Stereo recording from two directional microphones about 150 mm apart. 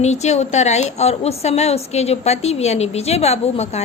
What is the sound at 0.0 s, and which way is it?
A woman's voice, 50° left (ahead or behind).